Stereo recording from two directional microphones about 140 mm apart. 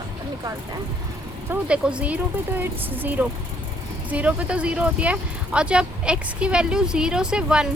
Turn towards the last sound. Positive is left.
turn(degrees=-5)  # may be behind; listen again after turning